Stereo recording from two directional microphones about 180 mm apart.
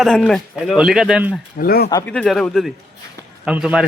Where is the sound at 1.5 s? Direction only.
55° left (ahead or behind).